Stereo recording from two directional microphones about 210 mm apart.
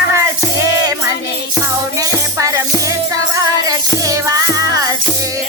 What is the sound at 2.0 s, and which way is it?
Music, 15° right (ahead or behind).